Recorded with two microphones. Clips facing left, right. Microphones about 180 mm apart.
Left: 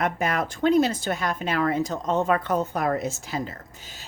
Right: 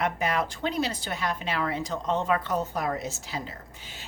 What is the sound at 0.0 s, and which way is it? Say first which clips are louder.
Speech: left 2 dB; 50° left (ahead or behind).